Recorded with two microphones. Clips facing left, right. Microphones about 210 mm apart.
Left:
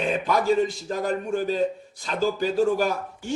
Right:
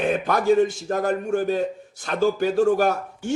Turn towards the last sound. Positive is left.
turn(degrees=-50)  # may be behind; listen again after turning